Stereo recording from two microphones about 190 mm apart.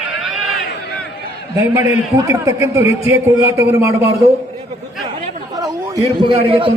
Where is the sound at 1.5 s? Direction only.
10° right (ahead or behind).